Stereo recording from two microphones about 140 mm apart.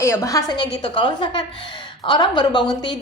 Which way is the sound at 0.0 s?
20° left (ahead or behind).